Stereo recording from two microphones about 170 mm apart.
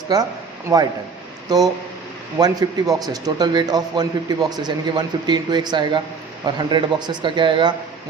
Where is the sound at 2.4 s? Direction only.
20° right (ahead or behind).